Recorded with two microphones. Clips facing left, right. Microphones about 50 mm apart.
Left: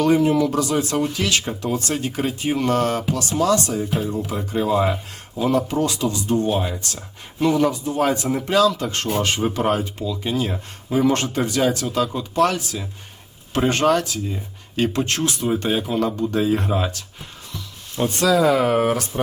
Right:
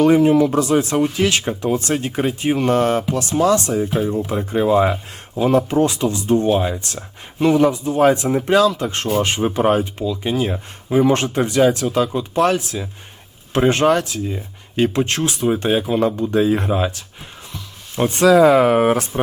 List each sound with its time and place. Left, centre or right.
0.0 s speech: right
17.9 s speech: right